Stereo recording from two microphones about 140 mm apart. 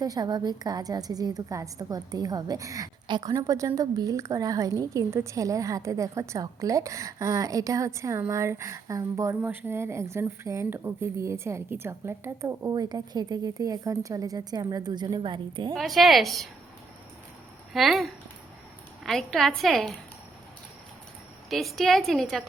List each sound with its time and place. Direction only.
0.0 s a woman's voice: 30° right (ahead or behind)
15.7 s a woman's voice: centre (ahead or behind)
17.7 s a woman's voice: centre (ahead or behind)
21.5 s a woman's voice: centre (ahead or behind)